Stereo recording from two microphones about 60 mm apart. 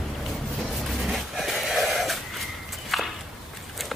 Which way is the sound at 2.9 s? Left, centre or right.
Centre.